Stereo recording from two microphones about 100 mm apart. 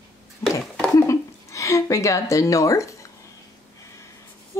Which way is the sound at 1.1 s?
30° left (ahead or behind).